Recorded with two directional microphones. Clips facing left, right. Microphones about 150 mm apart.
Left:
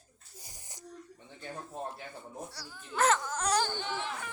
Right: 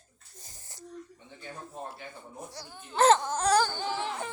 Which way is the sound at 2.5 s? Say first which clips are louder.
Right 2 dB; 25° right (ahead or behind).